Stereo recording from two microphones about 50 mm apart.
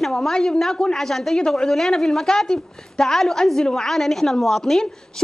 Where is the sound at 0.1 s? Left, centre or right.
Centre.